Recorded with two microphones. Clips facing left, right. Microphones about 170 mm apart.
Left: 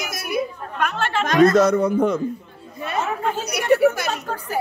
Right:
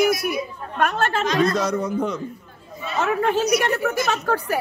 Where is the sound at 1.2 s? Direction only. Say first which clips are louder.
Left 8 dB; 50° left (ahead or behind).